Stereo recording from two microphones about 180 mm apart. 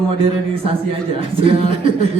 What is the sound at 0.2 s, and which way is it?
A man's voice, 30° right (ahead or behind).